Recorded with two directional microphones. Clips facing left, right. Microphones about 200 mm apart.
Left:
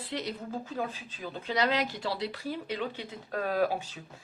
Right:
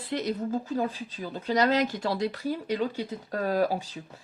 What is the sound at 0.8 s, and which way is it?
Speech, 35° right (ahead or behind).